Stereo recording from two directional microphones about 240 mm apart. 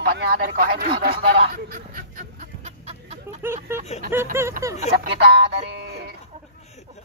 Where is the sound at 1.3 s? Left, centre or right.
Right.